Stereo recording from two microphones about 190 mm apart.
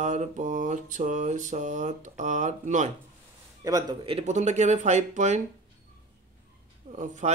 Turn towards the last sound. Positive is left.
turn(degrees=-40)  # may be behind; listen again after turning